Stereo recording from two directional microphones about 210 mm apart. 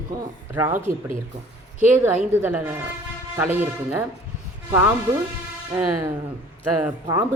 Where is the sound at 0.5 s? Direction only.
10° right (ahead or behind).